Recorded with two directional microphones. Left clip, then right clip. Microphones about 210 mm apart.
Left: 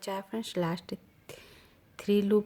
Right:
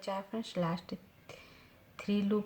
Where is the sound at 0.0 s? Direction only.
45° left (ahead or behind).